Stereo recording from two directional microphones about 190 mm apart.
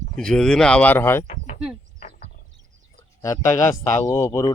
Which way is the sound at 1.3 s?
35° left (ahead or behind).